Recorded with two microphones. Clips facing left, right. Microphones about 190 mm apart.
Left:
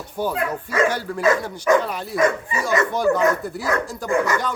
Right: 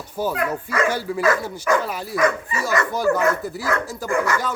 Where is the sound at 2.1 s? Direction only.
20° left (ahead or behind).